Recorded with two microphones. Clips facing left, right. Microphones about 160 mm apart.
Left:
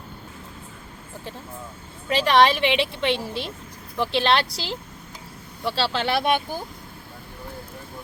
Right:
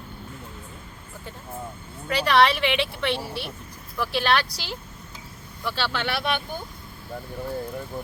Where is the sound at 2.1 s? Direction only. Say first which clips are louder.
Left 2 dB; 20° left (ahead or behind).